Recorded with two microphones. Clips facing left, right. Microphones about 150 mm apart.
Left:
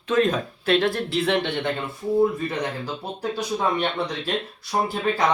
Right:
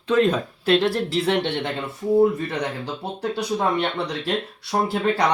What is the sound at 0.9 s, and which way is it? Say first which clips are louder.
Speech: right 1 dB; 35° right (ahead or behind).